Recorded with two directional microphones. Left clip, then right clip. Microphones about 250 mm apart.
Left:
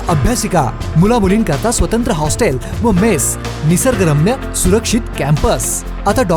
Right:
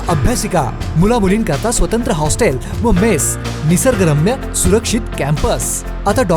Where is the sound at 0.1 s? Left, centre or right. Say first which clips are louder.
Left 1 dB; centre.